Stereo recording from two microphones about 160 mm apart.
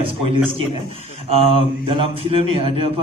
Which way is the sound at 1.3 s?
35° right (ahead or behind).